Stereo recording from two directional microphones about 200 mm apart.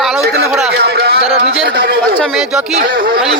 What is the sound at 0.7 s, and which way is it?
Speech, 55° right (ahead or behind).